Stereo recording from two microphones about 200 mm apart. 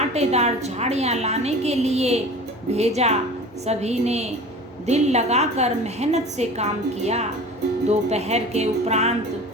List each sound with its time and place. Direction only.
0.0 s a woman's voice: 35° right (ahead or behind)